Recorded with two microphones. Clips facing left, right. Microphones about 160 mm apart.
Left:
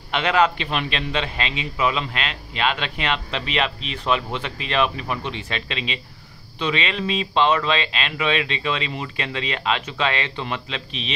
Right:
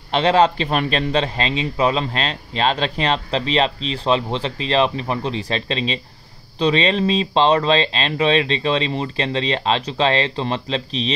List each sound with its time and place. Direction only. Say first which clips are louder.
0.1 s a man's voice: right 4 dB; 30° right (ahead or behind)